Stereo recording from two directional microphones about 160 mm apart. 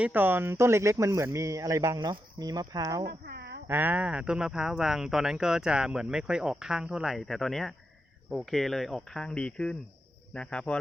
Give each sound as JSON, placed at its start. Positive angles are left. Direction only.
{"t": 0.0, "sound": "speech", "side_deg": -10}
{"t": 3.1, "sound": "a sound", "side_deg": -80}
{"t": 3.7, "sound": "a man's voice", "side_deg": -10}